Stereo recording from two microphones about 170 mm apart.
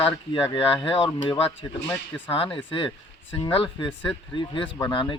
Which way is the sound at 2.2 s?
30° left (ahead or behind).